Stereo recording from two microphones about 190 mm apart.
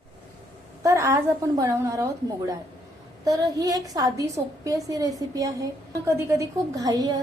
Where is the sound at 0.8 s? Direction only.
15° right (ahead or behind).